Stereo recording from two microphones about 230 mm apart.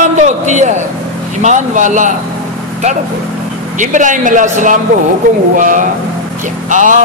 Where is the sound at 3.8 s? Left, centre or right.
Right.